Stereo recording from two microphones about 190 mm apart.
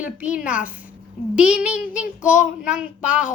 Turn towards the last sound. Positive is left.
turn(degrees=-5)  # may be behind; listen again after turning